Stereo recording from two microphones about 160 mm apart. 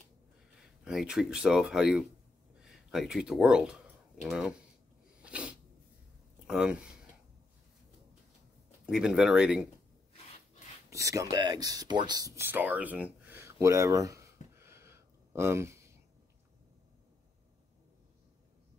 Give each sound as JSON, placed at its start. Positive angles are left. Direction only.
{"t": 0.6, "sound": "speech", "side_deg": -5}
{"t": 5.2, "sound": "sneeze", "side_deg": -10}
{"t": 6.4, "sound": "speech", "side_deg": -5}
{"t": 8.8, "sound": "speech", "side_deg": -5}
{"t": 10.9, "sound": "speech", "side_deg": -20}